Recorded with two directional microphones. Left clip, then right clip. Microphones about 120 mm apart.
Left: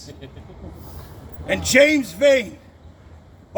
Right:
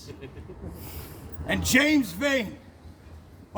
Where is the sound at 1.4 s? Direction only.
35° right (ahead or behind).